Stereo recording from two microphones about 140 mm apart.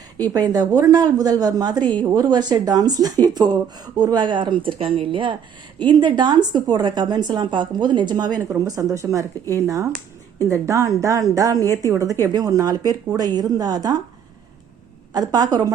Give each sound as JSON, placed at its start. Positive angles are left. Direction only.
{"t": 0.3, "sound": "a woman's voice", "side_deg": -30}
{"t": 15.1, "sound": "a woman's voice", "side_deg": -30}